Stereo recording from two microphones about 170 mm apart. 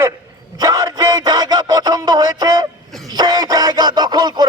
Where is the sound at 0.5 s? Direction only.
20° right (ahead or behind).